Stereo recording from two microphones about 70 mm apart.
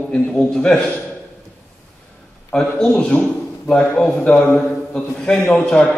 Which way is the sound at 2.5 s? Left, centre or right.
Centre.